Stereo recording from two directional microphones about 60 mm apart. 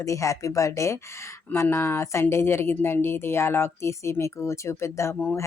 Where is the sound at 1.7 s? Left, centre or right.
Left.